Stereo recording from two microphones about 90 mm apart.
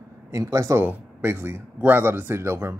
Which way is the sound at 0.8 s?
20° right (ahead or behind).